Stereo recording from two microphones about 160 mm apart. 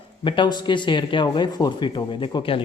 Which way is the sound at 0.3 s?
30° left (ahead or behind).